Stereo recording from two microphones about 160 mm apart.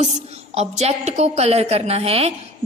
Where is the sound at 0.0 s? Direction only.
40° right (ahead or behind).